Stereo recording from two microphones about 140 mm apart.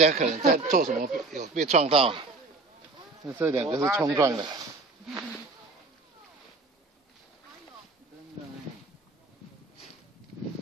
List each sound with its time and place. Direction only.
0.0 s speech: 55° right (ahead or behind)
1.9 s speech: 40° right (ahead or behind)
3.3 s speech: 20° right (ahead or behind)